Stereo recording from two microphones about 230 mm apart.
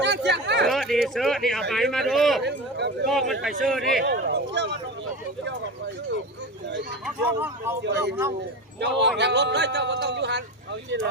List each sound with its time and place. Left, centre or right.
0.0 s chatter: right
0.7 s speech: centre
2.4 s a man's voice: right
3.1 s speech: centre
4.0 s speech: right
7.0 s speech: centre
7.9 s a man's voice: right